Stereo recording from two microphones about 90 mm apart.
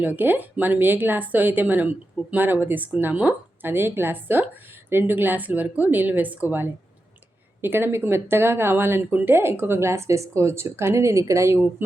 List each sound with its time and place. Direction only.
0.0 s speech: 20° right (ahead or behind)